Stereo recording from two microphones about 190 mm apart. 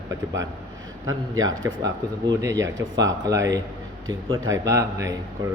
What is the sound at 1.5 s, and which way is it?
Speech, 90° right.